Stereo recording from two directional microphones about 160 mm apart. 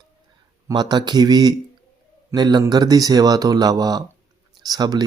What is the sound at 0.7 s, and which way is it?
Speech, 25° right (ahead or behind).